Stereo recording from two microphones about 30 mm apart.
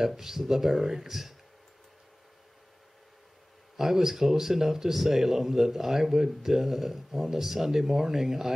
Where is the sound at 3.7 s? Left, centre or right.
Centre.